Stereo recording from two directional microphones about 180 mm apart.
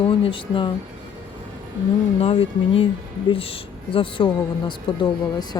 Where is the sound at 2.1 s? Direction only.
30° left (ahead or behind).